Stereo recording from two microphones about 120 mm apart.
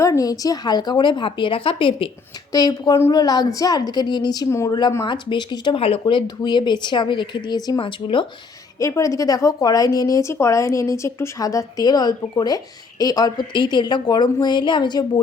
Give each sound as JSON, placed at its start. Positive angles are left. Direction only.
{"t": 0.0, "sound": "speech", "side_deg": 30}
{"t": 2.5, "sound": "speech", "side_deg": 35}
{"t": 4.4, "sound": "speech", "side_deg": 25}
{"t": 5.0, "sound": "speech", "side_deg": 40}
{"t": 8.8, "sound": "speech", "side_deg": 30}